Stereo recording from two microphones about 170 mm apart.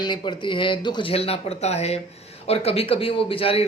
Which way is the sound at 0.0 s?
25° left (ahead or behind).